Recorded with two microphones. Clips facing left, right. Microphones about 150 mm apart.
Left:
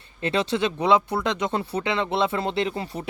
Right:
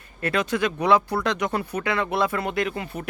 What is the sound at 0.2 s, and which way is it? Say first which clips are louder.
Speech: even; 25° left (ahead or behind).